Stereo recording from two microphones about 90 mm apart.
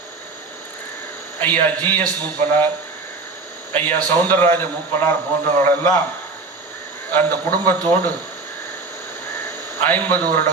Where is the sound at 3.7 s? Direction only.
20° left (ahead or behind).